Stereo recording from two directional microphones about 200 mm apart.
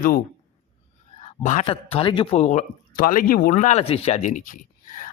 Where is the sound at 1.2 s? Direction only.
35° left (ahead or behind).